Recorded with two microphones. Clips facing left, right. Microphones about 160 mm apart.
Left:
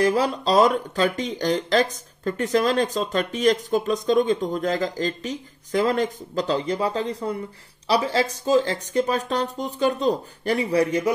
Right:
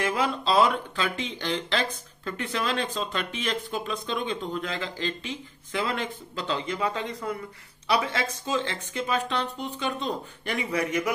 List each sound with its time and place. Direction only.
0.0 s speech: 40° left (ahead or behind)